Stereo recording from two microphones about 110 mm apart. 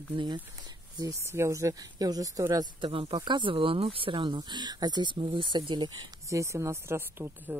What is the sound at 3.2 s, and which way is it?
Speech, 45° right (ahead or behind).